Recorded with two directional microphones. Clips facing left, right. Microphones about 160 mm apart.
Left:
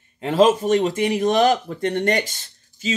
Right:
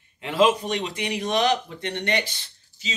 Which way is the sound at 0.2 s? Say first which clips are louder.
Left 4 dB; 40° left (ahead or behind).